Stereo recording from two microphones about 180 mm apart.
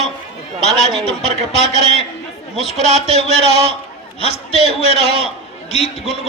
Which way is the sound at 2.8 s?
35° right (ahead or behind).